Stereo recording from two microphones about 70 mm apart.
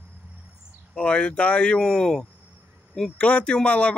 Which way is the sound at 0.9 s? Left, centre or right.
Centre.